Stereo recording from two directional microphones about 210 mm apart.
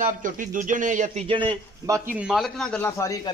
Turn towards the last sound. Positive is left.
turn(degrees=15)  # may be behind; listen again after turning